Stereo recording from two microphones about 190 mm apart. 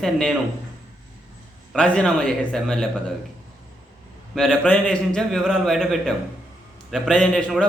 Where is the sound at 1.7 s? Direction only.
5° left (ahead or behind).